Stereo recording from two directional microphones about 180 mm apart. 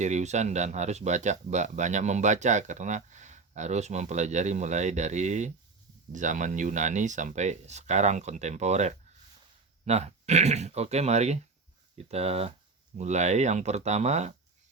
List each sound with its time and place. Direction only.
0.0 s speech: 40° right (ahead or behind)